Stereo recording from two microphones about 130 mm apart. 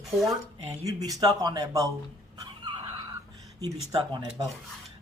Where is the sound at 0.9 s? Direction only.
25° right (ahead or behind).